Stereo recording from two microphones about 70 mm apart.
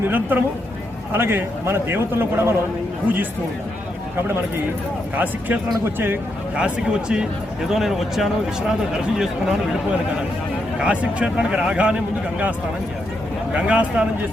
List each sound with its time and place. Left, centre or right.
0.0 s a man's voice: right
5.1 s a man's voice: right
6.6 s speech: centre
10.8 s speech: centre
13.5 s speech: centre